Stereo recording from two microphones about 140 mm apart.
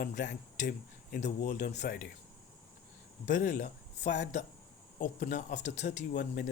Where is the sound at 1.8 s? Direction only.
90° left.